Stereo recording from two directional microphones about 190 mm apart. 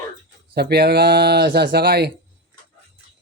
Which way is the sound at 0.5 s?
60° right (ahead or behind).